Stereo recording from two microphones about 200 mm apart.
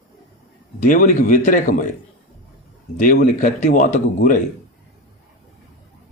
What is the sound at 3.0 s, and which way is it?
A man's voice, 40° left (ahead or behind).